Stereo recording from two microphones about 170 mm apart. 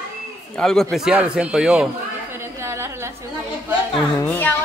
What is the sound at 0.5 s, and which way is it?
A man's voice, 5° left (ahead or behind).